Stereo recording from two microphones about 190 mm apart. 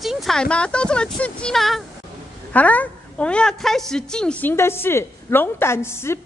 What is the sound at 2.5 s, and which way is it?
A woman's voice, 10° left (ahead or behind).